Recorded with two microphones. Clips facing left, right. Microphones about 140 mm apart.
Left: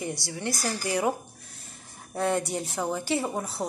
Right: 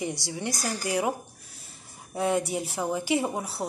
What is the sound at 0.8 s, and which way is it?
Speech, 5° right (ahead or behind).